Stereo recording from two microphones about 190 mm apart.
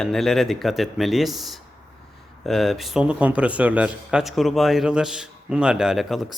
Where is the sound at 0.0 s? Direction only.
Centre (ahead or behind).